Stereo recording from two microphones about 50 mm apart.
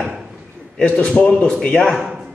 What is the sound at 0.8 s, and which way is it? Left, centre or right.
Speech, left.